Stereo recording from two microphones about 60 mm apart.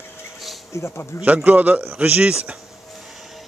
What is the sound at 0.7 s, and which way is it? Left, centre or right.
Speech, left.